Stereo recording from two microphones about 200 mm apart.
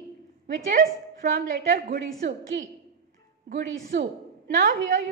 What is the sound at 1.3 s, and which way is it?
Speech, 50° right (ahead or behind).